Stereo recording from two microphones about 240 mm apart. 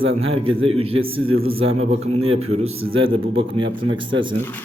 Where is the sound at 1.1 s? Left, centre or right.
Right.